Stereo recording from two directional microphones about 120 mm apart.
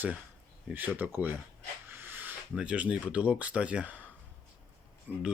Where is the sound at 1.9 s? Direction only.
15° right (ahead or behind).